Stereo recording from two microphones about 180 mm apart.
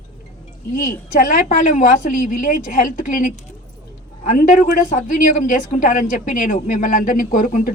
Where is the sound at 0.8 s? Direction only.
50° left (ahead or behind).